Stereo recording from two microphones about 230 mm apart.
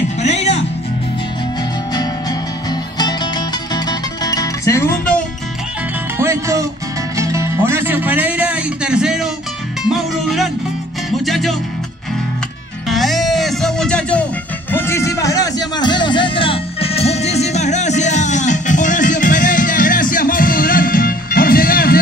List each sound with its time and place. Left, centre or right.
0.2 s music: left
2.7 s music: centre
6.1 s music: centre
12.8 s music: centre; by 22.0 s left